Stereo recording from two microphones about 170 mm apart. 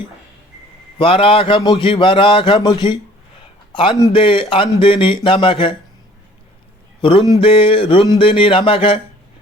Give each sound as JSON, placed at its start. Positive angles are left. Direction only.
{"t": 0.9, "sound": "a man's voice", "side_deg": 30}
{"t": 4.1, "sound": "a man's voice", "side_deg": 30}
{"t": 7.0, "sound": "a man's voice", "side_deg": 30}